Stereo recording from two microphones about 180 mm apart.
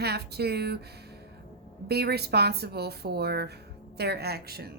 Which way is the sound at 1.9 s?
65° right (ahead or behind).